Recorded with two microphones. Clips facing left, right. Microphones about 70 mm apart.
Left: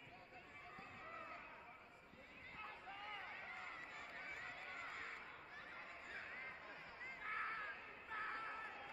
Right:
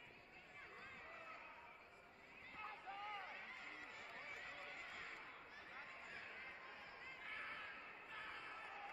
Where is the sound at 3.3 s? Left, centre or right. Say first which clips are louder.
Left 2 dB; left.